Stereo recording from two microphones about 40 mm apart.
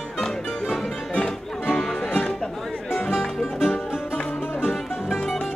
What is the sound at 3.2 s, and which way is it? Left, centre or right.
Music, centre.